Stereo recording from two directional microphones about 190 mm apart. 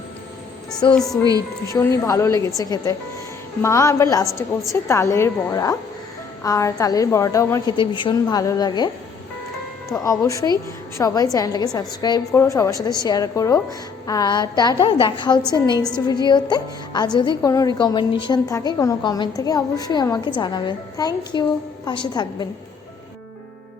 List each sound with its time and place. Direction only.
0.9 s a woman's voice: centre (ahead or behind)
1.2 s a woman's voice: 20° right (ahead or behind)
1.6 s a woman's voice: 15° left (ahead or behind)
9.9 s a woman's voice: 15° left (ahead or behind)